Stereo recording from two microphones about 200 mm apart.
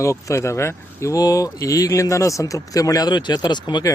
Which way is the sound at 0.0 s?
15° left (ahead or behind).